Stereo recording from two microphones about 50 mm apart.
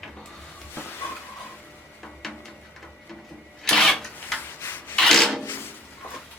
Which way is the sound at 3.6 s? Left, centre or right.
Centre.